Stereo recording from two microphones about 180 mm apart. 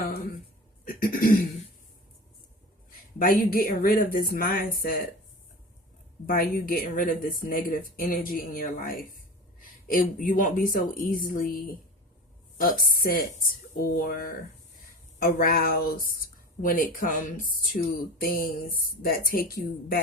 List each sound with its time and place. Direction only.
0.0 s a woman's voice: 60° left (ahead or behind)
3.2 s speech: 50° left (ahead or behind)
6.2 s speech: 55° left (ahead or behind)
12.8 s a woman's voice: 50° left (ahead or behind)